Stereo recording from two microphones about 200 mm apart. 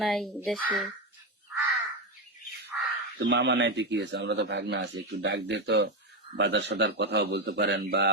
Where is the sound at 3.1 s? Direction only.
60° right (ahead or behind).